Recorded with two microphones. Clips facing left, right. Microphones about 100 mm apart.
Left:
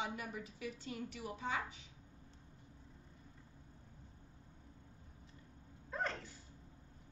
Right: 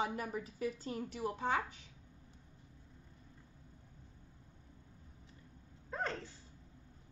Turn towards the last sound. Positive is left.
turn(degrees=-30)  # may be behind; listen again after turning